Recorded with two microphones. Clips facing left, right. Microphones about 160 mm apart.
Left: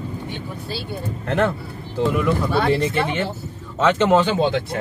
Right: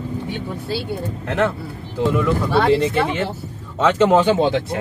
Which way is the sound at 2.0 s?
5° left (ahead or behind).